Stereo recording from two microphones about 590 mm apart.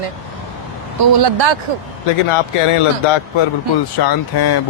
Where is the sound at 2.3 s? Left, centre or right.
Left.